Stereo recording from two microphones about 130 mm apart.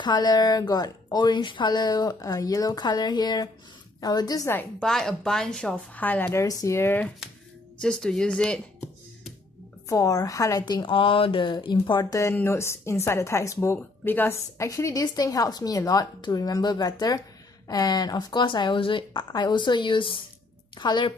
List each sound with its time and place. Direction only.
0.0 s speech: 35° left (ahead or behind)
4.5 s speech: 15° left (ahead or behind)
4.8 s a woman's voice: 5° left (ahead or behind)
7.8 s speech: 5° left (ahead or behind)
9.8 s speech: 25° left (ahead or behind)